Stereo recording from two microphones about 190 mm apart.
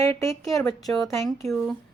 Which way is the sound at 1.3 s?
Centre (ahead or behind).